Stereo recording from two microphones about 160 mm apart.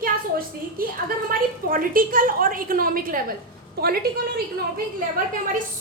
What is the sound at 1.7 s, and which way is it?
A woman's voice, 60° right (ahead or behind).